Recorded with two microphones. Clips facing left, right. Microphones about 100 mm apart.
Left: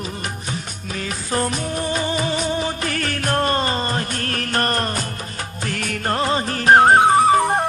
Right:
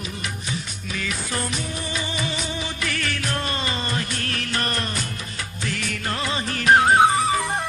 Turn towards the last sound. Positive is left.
turn(degrees=45)  # may be behind; listen again after turning